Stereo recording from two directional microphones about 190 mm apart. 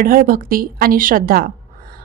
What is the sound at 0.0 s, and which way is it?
A woman's voice, 50° right (ahead or behind).